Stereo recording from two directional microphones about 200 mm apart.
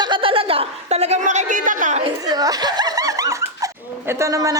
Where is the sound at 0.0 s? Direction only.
25° right (ahead or behind).